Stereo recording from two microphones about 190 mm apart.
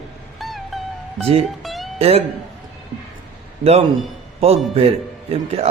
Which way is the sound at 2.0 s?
35° right (ahead or behind).